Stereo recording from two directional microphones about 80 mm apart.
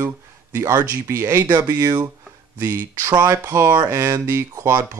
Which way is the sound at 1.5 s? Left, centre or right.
Right.